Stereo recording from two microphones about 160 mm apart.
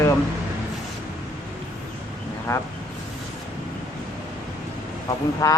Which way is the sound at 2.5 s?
20° left (ahead or behind).